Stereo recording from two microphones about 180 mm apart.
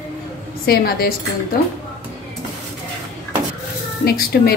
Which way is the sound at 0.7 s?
55° left (ahead or behind).